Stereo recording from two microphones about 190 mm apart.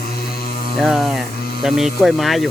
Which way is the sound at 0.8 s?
Centre (ahead or behind).